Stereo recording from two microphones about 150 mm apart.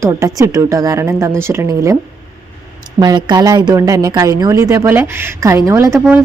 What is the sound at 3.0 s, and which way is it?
A woman's voice, 30° right (ahead or behind).